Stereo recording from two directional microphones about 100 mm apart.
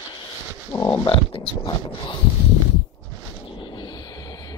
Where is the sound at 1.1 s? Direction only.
60° left (ahead or behind).